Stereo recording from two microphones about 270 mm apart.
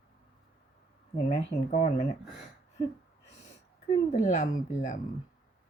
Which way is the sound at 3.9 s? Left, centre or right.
Left.